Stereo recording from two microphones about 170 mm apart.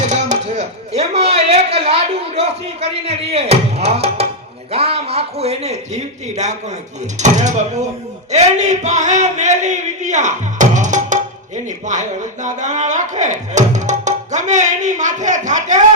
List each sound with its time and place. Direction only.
0.0 s chopping: 45° right (ahead or behind)
2.8 s a man's voice: 40° right (ahead or behind)
7.2 s a sound: 45° right (ahead or behind)